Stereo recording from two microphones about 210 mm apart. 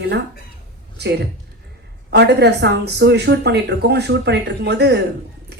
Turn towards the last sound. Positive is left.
turn(degrees=-50)  # may be behind; listen again after turning